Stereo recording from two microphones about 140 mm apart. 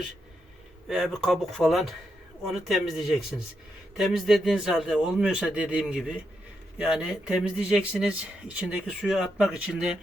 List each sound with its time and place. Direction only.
0.9 s speech: centre (ahead or behind)